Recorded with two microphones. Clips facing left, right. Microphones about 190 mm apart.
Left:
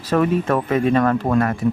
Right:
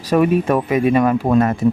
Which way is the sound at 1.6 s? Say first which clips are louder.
Right 4 dB; 25° right (ahead or behind).